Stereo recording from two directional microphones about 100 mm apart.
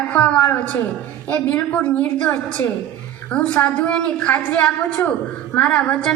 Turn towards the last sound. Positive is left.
turn(degrees=10)  # may be behind; listen again after turning